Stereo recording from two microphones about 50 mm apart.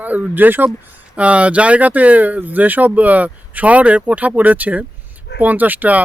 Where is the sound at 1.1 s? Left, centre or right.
Right.